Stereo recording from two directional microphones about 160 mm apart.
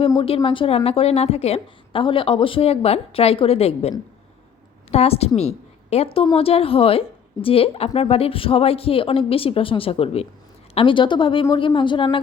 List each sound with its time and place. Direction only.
0.2 s a woman's voice: 35° left (ahead or behind)